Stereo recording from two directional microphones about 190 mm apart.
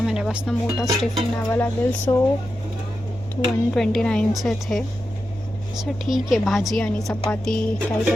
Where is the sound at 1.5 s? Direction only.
10° left (ahead or behind).